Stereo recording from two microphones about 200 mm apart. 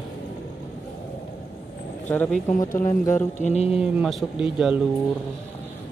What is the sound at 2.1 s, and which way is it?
Speech, 10° left (ahead or behind).